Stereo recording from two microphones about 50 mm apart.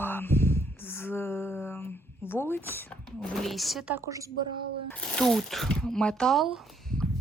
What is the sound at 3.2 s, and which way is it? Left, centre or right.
Speech, centre.